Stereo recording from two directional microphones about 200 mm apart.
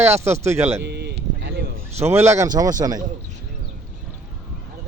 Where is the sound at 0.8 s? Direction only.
55° right (ahead or behind).